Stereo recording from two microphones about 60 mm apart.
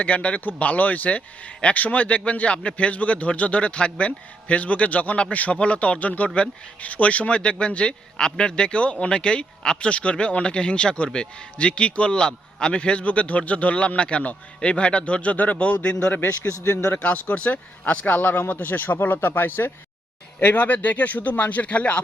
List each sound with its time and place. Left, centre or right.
0.0 s a man's voice: left
16.1 s a man's voice: left
17.0 s a man's voice: left